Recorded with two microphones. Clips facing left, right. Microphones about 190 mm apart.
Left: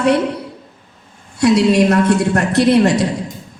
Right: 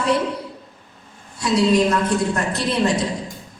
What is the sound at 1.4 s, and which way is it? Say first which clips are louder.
A woman's voice: left 5 dB; 70° left (ahead or behind).